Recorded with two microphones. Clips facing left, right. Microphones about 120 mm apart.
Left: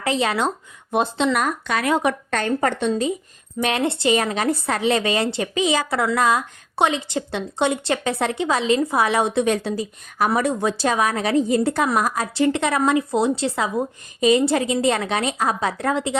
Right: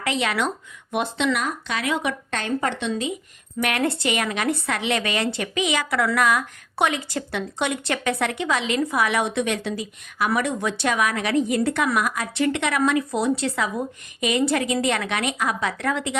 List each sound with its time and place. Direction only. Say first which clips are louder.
0.0 s speech: left 3 dB; 35° left (ahead or behind)
1.4 s a woman's voice: left 4 dB; 50° left (ahead or behind)
3.6 s a woman's voice: left 2 dB; 25° left (ahead or behind)